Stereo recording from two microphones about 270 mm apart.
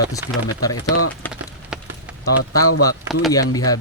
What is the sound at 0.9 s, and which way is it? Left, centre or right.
Speech, left.